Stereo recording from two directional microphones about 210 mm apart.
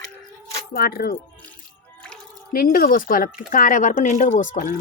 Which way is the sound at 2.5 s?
45° left (ahead or behind).